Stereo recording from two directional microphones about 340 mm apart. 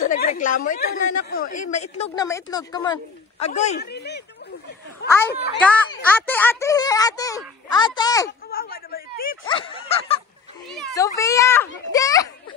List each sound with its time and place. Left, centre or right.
0.0 s chatter: left
0.7 s a woman's voice: left
5.3 s a woman's voice: left
5.6 s speech: centre
8.3 s a woman's voice: left
10.7 s a child's voice: centre